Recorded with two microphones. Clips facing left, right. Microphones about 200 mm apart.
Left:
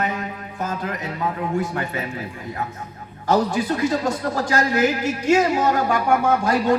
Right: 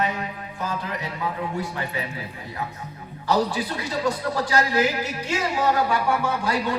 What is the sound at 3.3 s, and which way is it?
Speech, 45° left (ahead or behind).